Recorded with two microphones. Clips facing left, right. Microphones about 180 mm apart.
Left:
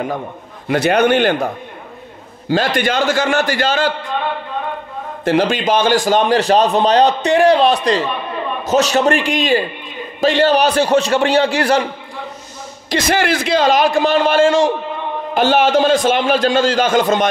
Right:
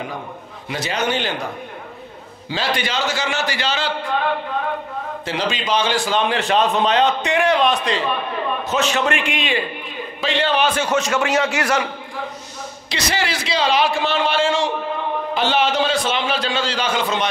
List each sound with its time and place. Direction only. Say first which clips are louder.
0.7 s speech: left 10 dB; 60° left (ahead or behind)
2.5 s a man's voice: left 7 dB; 50° left (ahead or behind)
5.2 s a man's voice: left 10 dB; 50° left (ahead or behind); by 11.9 s 35° left (ahead or behind)
13.1 s a man's voice: left 7 dB; 50° left (ahead or behind)